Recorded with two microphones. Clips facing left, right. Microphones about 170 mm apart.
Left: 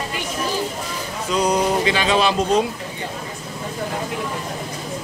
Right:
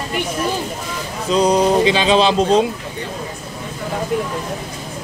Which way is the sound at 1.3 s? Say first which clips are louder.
Right 5 dB; 25° right (ahead or behind).